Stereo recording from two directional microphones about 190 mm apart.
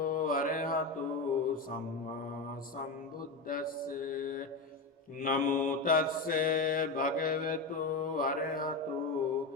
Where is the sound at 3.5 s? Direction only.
45° left (ahead or behind).